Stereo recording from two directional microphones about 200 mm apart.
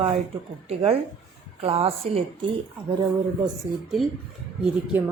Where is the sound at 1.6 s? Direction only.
30° right (ahead or behind).